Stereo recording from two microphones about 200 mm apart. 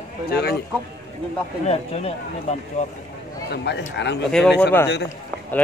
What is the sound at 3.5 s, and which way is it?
Speech, 60° left (ahead or behind).